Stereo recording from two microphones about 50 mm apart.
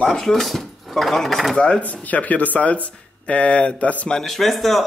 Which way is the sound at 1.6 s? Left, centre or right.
Left.